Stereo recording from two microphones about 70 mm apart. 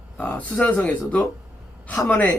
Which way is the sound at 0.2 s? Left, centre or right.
Centre.